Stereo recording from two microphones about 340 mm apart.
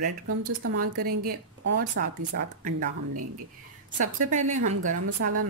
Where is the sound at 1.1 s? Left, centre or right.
Right.